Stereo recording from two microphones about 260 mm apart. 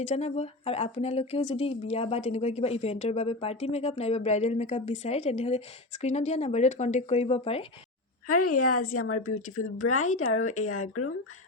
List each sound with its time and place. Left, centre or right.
0.1 s speech: left
8.3 s speech: left